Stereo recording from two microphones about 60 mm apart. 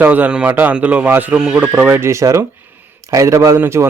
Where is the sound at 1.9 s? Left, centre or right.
Right.